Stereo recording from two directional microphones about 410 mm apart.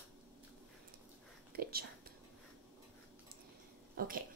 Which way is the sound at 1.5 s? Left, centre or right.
Right.